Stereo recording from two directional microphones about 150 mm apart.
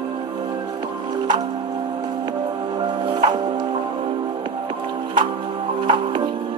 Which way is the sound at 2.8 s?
30° right (ahead or behind).